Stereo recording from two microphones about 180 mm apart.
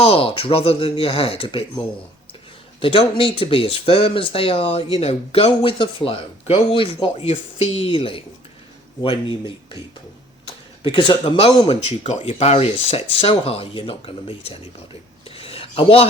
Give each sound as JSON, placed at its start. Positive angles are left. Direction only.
{"t": 0.0, "sound": "speech", "side_deg": 30}
{"t": 2.8, "sound": "speech", "side_deg": 30}
{"t": 10.8, "sound": "speech", "side_deg": 25}
{"t": 15.3, "sound": "a sound", "side_deg": 30}